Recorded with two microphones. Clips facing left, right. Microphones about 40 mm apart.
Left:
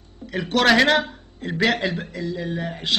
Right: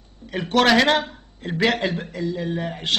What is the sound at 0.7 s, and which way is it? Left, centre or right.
Speech, centre.